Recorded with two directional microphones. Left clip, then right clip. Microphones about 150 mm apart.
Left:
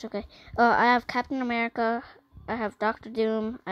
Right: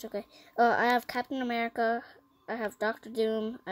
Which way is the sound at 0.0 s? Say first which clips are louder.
Left 3 dB; 25° left (ahead or behind).